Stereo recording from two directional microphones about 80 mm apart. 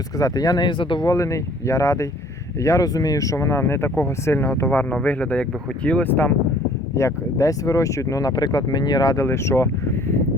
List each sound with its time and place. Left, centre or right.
0.2 s speech: left
0.6 s speech: left
1.0 s speech: left
6.9 s speech: left
8.3 s speech: left
9.1 s speech: left